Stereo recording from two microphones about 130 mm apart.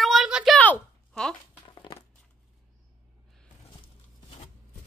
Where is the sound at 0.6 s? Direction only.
10° left (ahead or behind).